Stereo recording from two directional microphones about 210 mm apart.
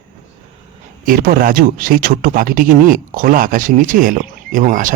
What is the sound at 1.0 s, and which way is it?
Speech, 40° right (ahead or behind).